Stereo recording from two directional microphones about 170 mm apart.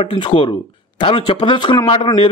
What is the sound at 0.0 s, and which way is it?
A man's voice, 35° left (ahead or behind).